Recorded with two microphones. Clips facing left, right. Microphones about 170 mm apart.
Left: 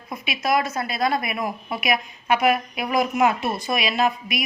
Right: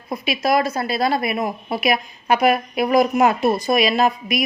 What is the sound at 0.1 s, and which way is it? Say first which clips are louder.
A woman's voice: right 4 dB; 35° right (ahead or behind).